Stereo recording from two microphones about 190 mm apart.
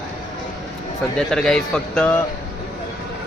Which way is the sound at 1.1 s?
5° left (ahead or behind).